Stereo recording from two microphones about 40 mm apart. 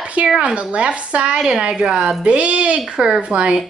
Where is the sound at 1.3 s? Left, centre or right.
Centre.